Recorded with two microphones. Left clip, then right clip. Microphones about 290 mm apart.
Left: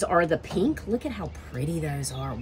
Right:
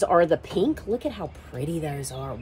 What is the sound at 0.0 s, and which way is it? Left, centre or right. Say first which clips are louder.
Speech: right 3 dB; right.